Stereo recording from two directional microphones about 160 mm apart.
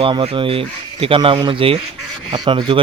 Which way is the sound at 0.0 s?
30° right (ahead or behind).